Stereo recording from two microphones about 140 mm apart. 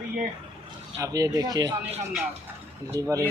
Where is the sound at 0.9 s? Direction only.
25° right (ahead or behind).